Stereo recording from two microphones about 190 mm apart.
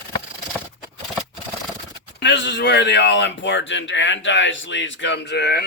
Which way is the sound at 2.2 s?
65° left (ahead or behind).